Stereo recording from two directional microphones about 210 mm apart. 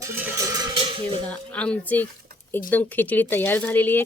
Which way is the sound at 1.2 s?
5° left (ahead or behind).